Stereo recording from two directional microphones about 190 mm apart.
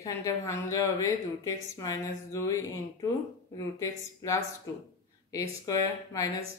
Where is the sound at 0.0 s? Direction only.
15° left (ahead or behind).